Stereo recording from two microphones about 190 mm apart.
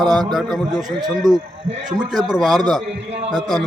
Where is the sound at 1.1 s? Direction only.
Centre (ahead or behind).